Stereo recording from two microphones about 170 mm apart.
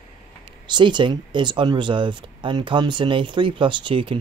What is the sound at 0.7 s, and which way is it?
Speech, 25° right (ahead or behind).